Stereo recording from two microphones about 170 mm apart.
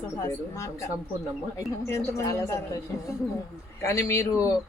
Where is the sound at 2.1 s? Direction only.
15° left (ahead or behind).